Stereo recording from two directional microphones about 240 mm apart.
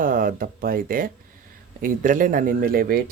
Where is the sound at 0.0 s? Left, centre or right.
Right.